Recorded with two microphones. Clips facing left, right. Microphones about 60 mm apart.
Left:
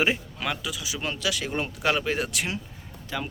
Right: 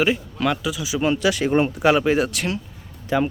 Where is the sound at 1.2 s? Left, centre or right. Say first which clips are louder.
Right 8 dB; right.